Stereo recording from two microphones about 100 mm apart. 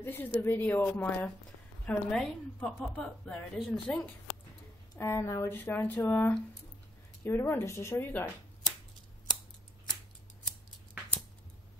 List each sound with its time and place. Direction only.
0.0 s speech: 20° left (ahead or behind)
1.9 s a woman's voice: 10° left (ahead or behind)
4.9 s speech: 25° left (ahead or behind)